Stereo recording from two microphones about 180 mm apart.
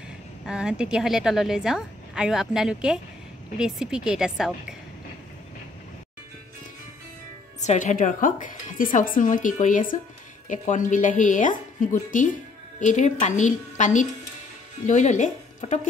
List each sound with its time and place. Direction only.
0.5 s a woman's voice: 5° right (ahead or behind)
7.6 s a woman's voice: 40° left (ahead or behind)